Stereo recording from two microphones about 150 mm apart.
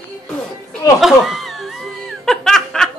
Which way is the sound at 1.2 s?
Centre (ahead or behind).